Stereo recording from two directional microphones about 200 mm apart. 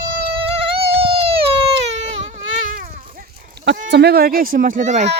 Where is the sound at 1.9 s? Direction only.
35° right (ahead or behind).